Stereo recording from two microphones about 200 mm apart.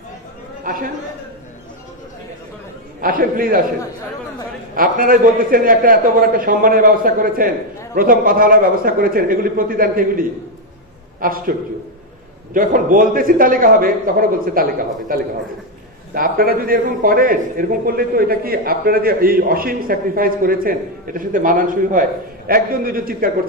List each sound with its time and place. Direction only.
0.7 s a man's voice: 45° right (ahead or behind)
3.0 s a man's voice: 45° right (ahead or behind)
4.7 s a man's voice: 45° right (ahead or behind)
12.5 s a man's voice: 45° right (ahead or behind)
16.2 s a man's voice: 45° right (ahead or behind)